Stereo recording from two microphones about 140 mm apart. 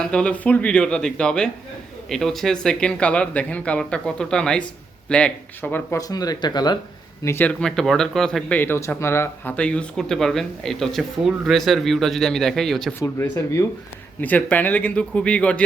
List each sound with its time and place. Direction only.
0.0 s speech: 5° left (ahead or behind)
6.0 s speech: 25° left (ahead or behind)
7.3 s speech: 15° left (ahead or behind)
13.0 s speech: 20° left (ahead or behind)